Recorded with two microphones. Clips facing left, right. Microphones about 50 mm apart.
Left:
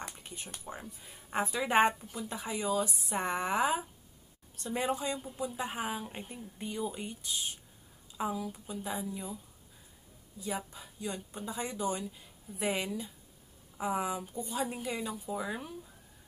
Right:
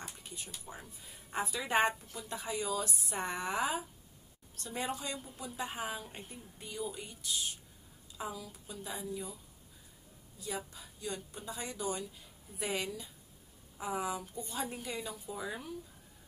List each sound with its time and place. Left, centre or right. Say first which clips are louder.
0.2 s a sound: left 2 dB; left
1.3 s speech: left 4 dB; left
4.6 s speech: left 5 dB; centre
4.9 s speech: left 6 dB; left
6.2 s speech: left 7 dB; left
10.4 s speech: left 3 dB; left
14.4 s speech: left 5 dB; centre